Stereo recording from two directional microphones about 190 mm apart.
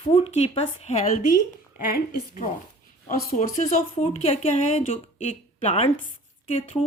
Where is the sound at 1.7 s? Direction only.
50° left (ahead or behind); by 6.8 s 30° left (ahead or behind).